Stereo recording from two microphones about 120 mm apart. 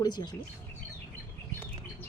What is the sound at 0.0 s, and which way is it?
Speech, 35° left (ahead or behind).